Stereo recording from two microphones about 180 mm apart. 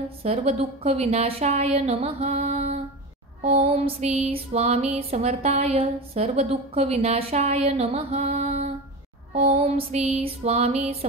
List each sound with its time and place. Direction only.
0.2 s music: 35° right (ahead or behind)